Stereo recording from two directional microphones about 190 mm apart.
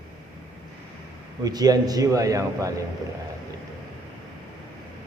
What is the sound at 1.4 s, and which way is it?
A man's voice, 20° right (ahead or behind).